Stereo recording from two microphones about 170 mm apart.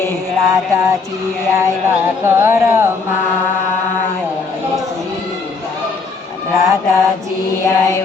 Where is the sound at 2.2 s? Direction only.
15° right (ahead or behind).